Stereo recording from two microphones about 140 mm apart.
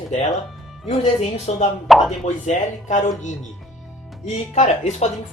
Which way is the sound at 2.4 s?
60° left (ahead or behind).